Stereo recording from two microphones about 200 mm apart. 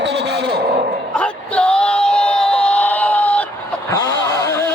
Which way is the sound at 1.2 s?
5° left (ahead or behind).